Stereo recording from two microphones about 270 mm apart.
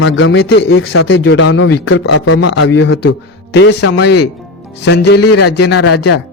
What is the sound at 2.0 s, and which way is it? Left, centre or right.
Speech, left.